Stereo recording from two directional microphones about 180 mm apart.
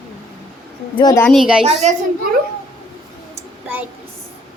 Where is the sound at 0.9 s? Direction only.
20° left (ahead or behind).